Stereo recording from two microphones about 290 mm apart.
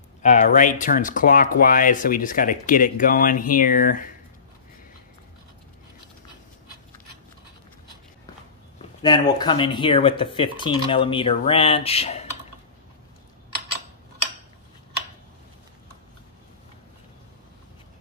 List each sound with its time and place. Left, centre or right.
0.2 s speech: left
8.7 s a sound: centre
9.4 s speech: centre